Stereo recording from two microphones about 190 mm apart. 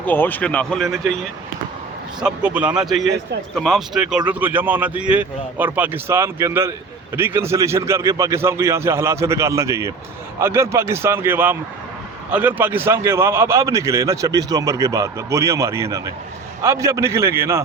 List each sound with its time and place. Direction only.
0.0 s a man's voice: 10° left (ahead or behind); by 17.6 s 15° right (ahead or behind)